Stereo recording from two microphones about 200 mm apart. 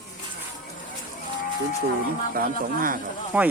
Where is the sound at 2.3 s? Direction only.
45° right (ahead or behind).